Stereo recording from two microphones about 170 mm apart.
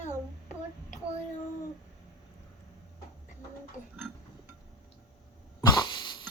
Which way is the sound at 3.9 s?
10° right (ahead or behind).